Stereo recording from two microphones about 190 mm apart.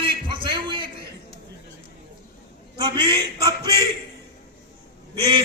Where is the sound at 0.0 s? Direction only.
25° right (ahead or behind).